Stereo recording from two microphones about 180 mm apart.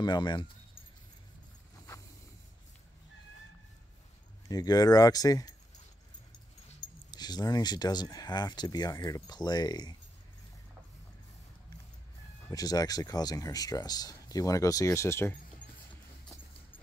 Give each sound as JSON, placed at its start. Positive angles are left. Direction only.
{"t": 0.0, "sound": "speech", "side_deg": 25}
{"t": 4.5, "sound": "speech", "side_deg": 20}
{"t": 6.8, "sound": "speech", "side_deg": 20}
{"t": 12.4, "sound": "speech", "side_deg": 20}